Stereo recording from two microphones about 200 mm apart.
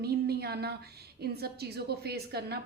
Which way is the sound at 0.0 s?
50° right (ahead or behind).